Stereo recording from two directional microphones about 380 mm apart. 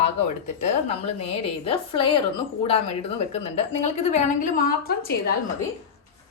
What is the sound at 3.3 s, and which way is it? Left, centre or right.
A woman's voice, centre.